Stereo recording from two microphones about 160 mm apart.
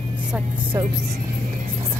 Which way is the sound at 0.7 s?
20° right (ahead or behind).